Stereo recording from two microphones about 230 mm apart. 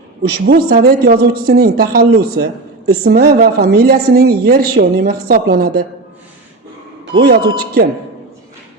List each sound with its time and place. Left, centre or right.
0.4 s speech: right
7.1 s speech: right